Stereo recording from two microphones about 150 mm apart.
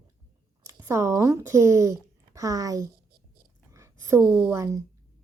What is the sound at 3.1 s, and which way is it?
Whispering, 85° right.